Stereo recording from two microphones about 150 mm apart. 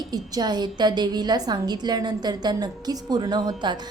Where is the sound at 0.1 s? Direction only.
25° right (ahead or behind).